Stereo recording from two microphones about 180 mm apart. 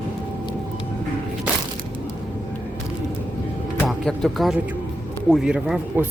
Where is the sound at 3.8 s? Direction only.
Centre (ahead or behind).